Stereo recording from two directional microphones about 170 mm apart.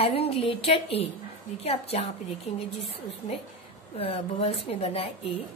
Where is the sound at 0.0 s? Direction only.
35° left (ahead or behind).